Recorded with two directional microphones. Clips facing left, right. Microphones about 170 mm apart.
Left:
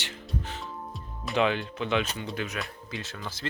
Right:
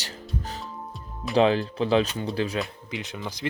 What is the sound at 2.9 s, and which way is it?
Speech, 15° right (ahead or behind).